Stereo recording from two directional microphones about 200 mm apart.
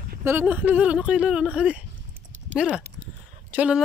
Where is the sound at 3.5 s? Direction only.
5° right (ahead or behind).